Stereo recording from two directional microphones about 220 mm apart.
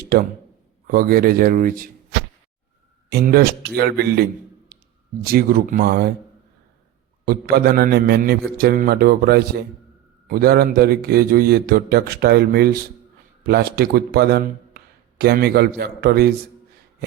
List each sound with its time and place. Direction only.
0.9 s a man's voice: 40° right (ahead or behind)
3.1 s a man's voice: 45° right (ahead or behind)
7.3 s a man's voice: 45° right (ahead or behind)